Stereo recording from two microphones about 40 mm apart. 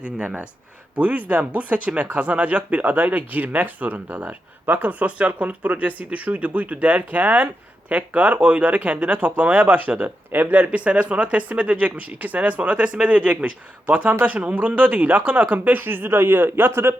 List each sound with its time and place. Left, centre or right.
0.9 s speech: right
10.3 s speech: right